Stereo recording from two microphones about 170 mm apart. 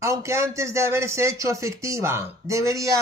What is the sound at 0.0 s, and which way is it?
A man's voice, 15° right (ahead or behind).